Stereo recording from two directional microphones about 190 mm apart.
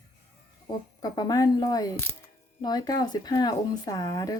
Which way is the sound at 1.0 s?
20° left (ahead or behind).